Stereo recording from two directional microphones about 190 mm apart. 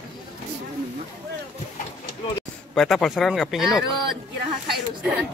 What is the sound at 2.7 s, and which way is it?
Speech, centre (ahead or behind).